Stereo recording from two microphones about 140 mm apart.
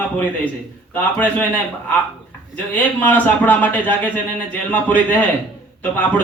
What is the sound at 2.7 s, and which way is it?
Speech, 15° left (ahead or behind).